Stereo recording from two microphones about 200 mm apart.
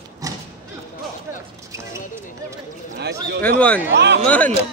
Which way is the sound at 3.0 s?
50° right (ahead or behind).